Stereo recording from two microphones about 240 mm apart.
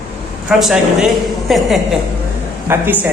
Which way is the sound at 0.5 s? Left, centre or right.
Centre.